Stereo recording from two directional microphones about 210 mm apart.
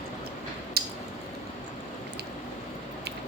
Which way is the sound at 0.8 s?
50° right (ahead or behind).